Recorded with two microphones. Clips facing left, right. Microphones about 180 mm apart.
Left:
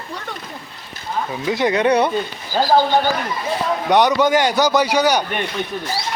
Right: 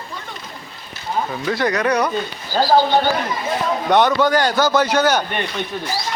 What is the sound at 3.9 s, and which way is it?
A man's voice, 15° left (ahead or behind).